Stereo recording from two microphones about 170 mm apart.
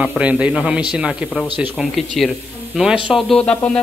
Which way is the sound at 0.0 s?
5° right (ahead or behind).